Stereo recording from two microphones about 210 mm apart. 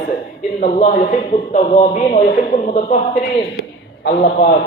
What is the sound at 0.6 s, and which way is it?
A man's voice, 40° left (ahead or behind).